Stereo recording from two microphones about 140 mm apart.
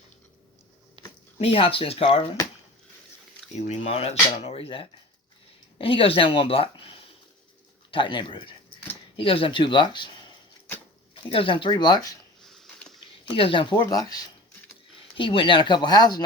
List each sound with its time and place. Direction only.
1.0 s a sound: 35° right (ahead or behind)
1.4 s speech: 45° left (ahead or behind)
3.5 s speech: 50° left (ahead or behind); by 10.1 s 35° left (ahead or behind)
11.1 s speech: 40° left (ahead or behind)
12.4 s a sound: 5° left (ahead or behind)
13.2 s speech: 40° left (ahead or behind)
15.1 s speech: 40° left (ahead or behind)